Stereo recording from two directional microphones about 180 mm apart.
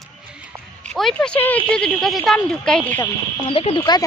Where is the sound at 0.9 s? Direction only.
5° left (ahead or behind).